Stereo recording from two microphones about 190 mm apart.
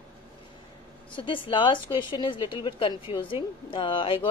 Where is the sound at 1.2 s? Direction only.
25° left (ahead or behind).